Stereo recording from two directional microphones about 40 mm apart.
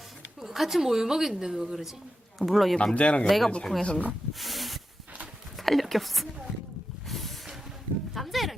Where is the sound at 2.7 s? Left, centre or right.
Left.